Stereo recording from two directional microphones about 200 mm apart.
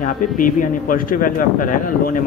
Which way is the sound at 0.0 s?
40° left (ahead or behind).